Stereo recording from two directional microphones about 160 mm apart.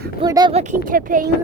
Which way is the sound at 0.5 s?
50° right (ahead or behind).